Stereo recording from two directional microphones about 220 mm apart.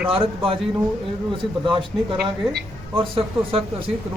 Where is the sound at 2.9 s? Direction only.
25° right (ahead or behind).